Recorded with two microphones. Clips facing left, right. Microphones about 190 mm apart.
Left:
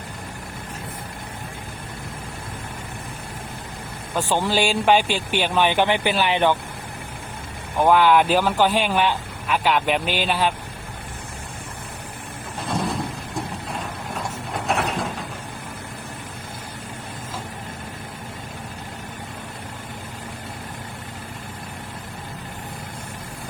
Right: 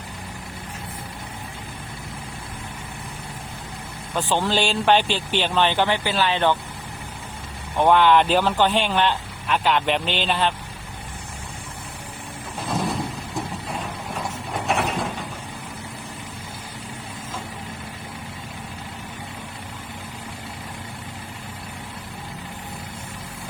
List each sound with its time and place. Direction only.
4.1 s speech: 10° left (ahead or behind)
7.8 s speech: 5° left (ahead or behind)
12.6 s a sound: centre (ahead or behind)